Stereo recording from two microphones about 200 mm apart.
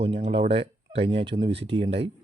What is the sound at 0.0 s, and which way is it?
Speech, 30° right (ahead or behind).